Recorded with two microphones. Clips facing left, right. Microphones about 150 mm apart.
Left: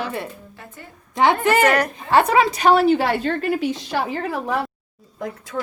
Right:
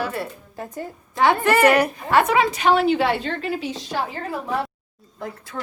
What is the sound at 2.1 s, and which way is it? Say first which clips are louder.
A woman's voice: left 3 dB; 35° left (ahead or behind).